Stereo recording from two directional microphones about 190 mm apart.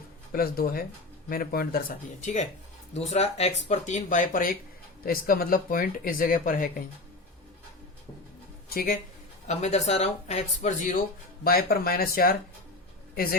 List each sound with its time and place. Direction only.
0.3 s speech: 50° left (ahead or behind)
8.7 s speech: 50° left (ahead or behind)
9.5 s speech: 35° left (ahead or behind)
11.4 s speech: 50° left (ahead or behind)